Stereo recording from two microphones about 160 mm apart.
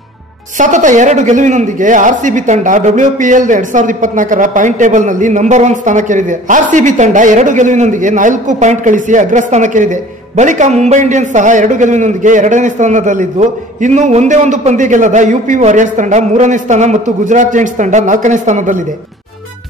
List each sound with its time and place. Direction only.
0.6 s a man's voice: 50° right (ahead or behind)